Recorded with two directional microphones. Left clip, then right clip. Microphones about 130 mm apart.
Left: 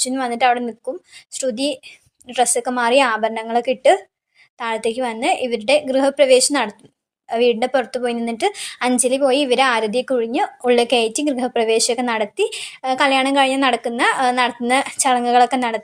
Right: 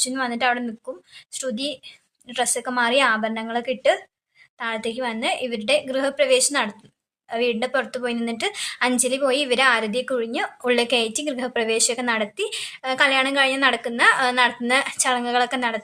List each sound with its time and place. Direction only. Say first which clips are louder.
0.0 s a woman's voice: left 5 dB; 40° left (ahead or behind)